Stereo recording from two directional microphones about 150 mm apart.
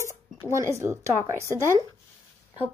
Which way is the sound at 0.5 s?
20° right (ahead or behind).